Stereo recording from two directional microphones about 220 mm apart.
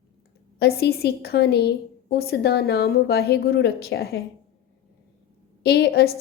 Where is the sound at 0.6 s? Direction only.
45° left (ahead or behind).